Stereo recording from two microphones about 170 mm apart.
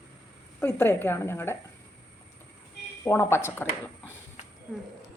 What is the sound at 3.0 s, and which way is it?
Speech, 15° left (ahead or behind).